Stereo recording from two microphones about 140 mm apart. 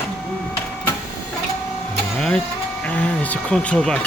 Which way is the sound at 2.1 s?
5° left (ahead or behind).